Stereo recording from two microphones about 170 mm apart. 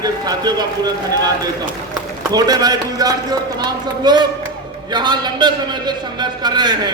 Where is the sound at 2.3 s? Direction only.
20° right (ahead or behind).